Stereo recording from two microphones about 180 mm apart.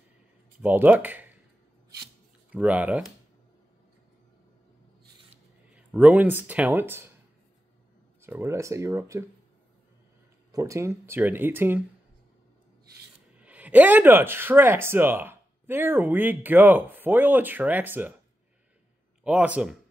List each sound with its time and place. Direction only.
0.6 s speech: 10° right (ahead or behind)
2.5 s speech: 10° right (ahead or behind)
5.3 s speech: 10° right (ahead or behind)
8.2 s speech: 15° right (ahead or behind)
10.5 s speech: 15° right (ahead or behind)
13.4 s speech: 10° right (ahead or behind)
19.2 s speech: 5° right (ahead or behind)